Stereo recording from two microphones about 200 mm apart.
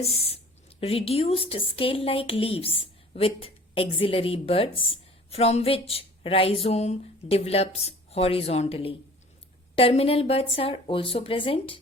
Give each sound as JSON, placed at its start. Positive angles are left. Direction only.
{"t": 0.0, "sound": "speech", "side_deg": 30}